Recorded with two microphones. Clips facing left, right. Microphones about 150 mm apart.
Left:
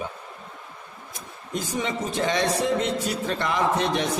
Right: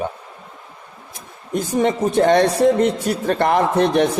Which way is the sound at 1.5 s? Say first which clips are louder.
Right 9 dB; 55° right (ahead or behind).